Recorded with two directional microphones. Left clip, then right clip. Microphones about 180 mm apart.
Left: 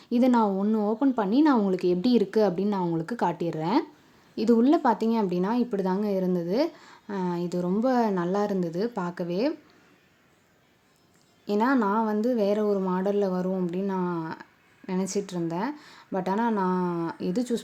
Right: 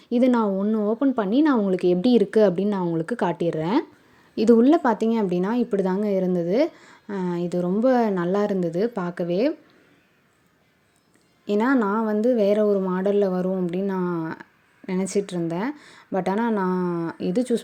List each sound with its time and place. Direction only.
0.1 s speech: 15° right (ahead or behind)
11.4 s speech: 20° right (ahead or behind)